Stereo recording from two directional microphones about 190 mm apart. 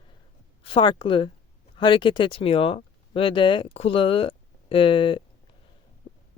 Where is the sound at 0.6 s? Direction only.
25° left (ahead or behind).